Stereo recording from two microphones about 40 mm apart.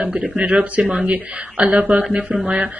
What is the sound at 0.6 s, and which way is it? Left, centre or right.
Speech, right.